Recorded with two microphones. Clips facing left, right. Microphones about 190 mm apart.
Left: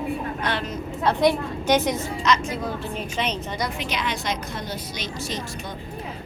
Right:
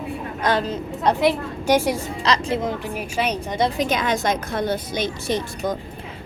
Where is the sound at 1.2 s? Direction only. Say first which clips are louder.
Even; 5° right (ahead or behind).